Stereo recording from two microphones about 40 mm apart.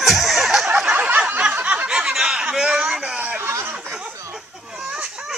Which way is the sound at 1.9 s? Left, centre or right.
Right.